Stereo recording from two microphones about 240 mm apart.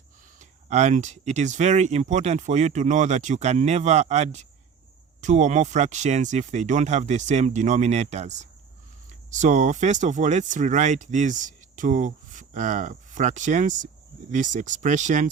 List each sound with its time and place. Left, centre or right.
0.3 s speech: right